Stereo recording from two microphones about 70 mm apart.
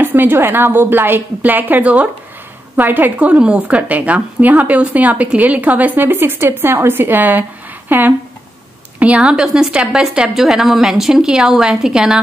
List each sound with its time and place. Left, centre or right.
0.0 s a woman's voice: right
9.2 s a woman's voice: centre